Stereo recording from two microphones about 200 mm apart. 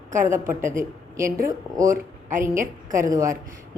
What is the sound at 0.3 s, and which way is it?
A woman's voice, 15° right (ahead or behind).